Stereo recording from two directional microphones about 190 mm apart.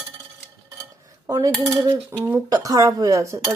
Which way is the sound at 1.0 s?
15° right (ahead or behind).